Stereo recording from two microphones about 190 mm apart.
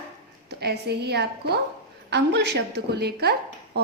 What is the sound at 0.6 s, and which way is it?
A woman's voice, 60° right (ahead or behind).